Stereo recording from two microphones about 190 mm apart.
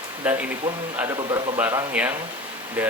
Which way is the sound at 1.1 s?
25° right (ahead or behind).